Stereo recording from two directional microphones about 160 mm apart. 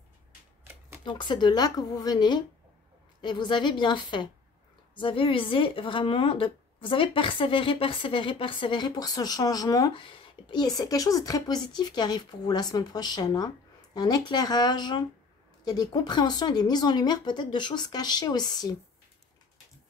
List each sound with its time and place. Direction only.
1.0 s speech: 30° left (ahead or behind)